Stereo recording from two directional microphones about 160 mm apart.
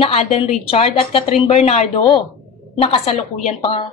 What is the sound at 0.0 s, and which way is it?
A woman's voice, 40° left (ahead or behind).